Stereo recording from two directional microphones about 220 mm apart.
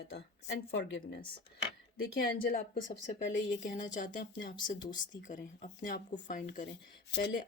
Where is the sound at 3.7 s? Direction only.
35° left (ahead or behind).